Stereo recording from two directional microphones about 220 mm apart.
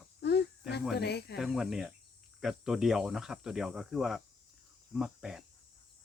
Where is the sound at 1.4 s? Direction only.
Centre (ahead or behind).